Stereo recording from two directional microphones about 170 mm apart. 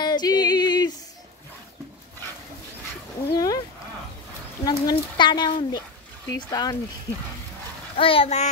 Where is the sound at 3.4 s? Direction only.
20° left (ahead or behind).